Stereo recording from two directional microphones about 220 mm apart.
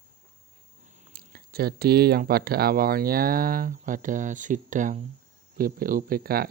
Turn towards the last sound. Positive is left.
turn(degrees=-45)  # may be behind; listen again after turning